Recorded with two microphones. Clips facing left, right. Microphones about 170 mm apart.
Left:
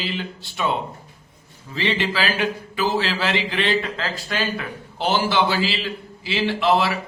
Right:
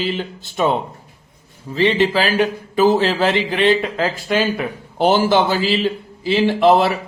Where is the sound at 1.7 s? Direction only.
45° right (ahead or behind).